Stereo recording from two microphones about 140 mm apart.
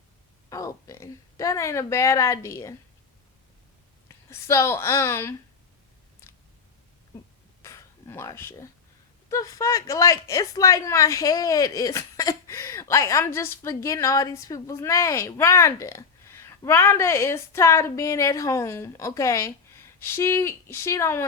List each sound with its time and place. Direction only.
0.5 s speech: 25° left (ahead or behind)
4.3 s speech: 20° left (ahead or behind)
7.6 s a sound: 20° left (ahead or behind)
9.3 s speech: 25° left (ahead or behind)